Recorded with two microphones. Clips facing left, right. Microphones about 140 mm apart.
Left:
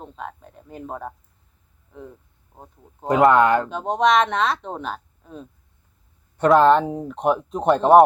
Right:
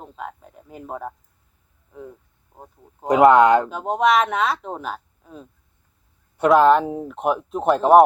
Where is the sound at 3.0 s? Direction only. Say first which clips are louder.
Right 3 dB; 20° right (ahead or behind).